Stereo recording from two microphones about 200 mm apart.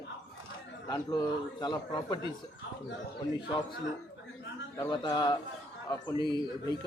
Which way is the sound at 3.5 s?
20° left (ahead or behind).